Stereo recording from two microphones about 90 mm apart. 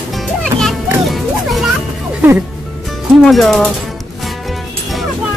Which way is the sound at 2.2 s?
20° right (ahead or behind).